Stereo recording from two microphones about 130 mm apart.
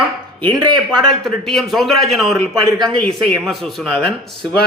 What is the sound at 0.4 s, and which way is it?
Speech, 35° right (ahead or behind).